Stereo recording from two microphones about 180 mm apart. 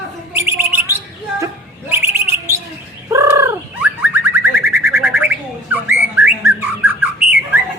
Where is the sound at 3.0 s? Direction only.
15° right (ahead or behind).